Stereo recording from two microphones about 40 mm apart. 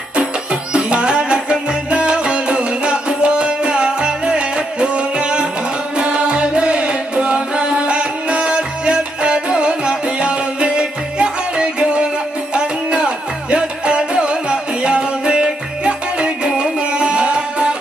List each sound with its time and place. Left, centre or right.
0.1 s music: right